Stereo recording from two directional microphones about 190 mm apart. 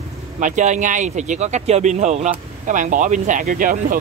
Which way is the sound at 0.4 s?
40° right (ahead or behind).